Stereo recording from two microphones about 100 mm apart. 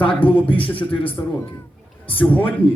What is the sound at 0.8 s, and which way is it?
Speech, 60° left (ahead or behind).